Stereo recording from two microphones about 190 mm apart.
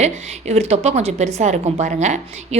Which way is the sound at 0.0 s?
35° right (ahead or behind).